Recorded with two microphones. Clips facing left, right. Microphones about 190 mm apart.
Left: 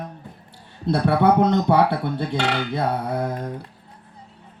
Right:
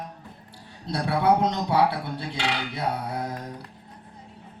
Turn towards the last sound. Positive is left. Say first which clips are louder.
# left 6 dB
turn(degrees=55)  # may be behind; listen again after turning